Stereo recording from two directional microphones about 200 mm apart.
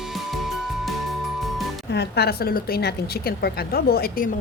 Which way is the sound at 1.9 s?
55° left (ahead or behind).